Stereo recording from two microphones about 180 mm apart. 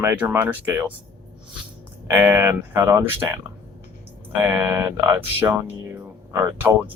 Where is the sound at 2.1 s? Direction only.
15° right (ahead or behind).